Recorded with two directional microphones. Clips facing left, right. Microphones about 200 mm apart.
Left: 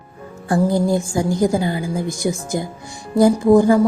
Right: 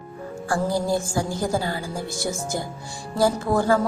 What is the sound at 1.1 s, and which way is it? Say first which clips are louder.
Speech: left 7 dB; 15° left (ahead or behind).